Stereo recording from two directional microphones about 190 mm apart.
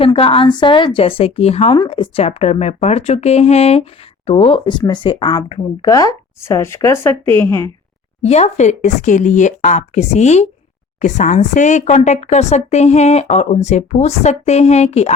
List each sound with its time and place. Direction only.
0.0 s speech: 30° left (ahead or behind); by 7.7 s 15° left (ahead or behind)
8.2 s speech: 35° left (ahead or behind)